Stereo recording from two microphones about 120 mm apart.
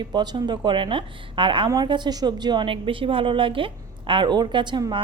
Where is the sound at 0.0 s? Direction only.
35° right (ahead or behind).